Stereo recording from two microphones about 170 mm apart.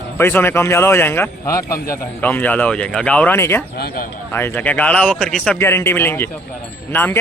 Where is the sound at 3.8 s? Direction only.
65° left (ahead or behind).